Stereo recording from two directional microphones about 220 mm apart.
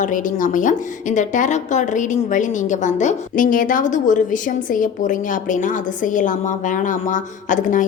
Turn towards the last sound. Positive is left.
turn(degrees=35)  # may be behind; listen again after turning